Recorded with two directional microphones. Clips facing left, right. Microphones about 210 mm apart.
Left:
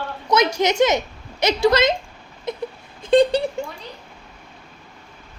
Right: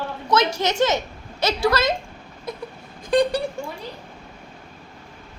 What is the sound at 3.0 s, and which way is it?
Speech, 25° left (ahead or behind).